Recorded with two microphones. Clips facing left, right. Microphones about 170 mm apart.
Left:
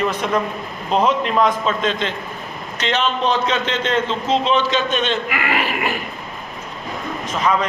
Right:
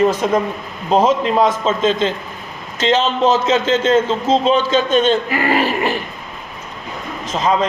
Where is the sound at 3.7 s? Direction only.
40° right (ahead or behind).